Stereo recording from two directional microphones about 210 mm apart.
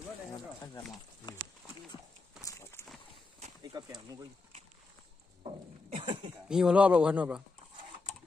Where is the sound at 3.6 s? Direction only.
20° right (ahead or behind).